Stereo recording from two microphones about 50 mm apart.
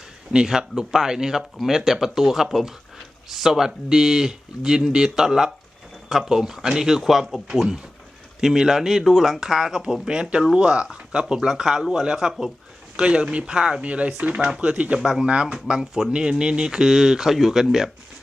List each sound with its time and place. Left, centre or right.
0.3 s speech: centre
14.9 s speech: centre
15.3 s speech: right
15.5 s speech: centre